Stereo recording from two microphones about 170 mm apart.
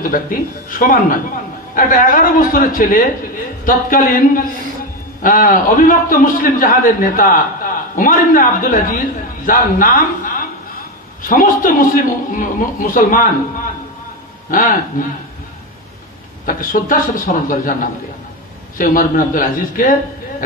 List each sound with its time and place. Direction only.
0.0 s a man's voice: 55° left (ahead or behind)
14.5 s a man's voice: 55° left (ahead or behind)
16.4 s a man's voice: 55° left (ahead or behind)
18.8 s a man's voice: 55° left (ahead or behind)